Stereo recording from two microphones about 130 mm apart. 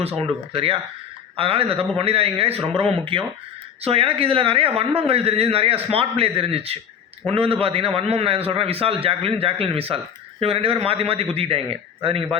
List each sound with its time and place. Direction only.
0.0 s a man's voice: 50° right (ahead or behind)